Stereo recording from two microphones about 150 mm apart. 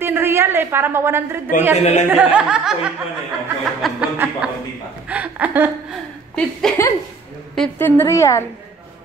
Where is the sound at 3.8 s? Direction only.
Centre (ahead or behind).